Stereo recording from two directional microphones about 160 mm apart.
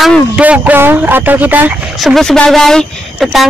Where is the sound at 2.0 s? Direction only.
Centre (ahead or behind).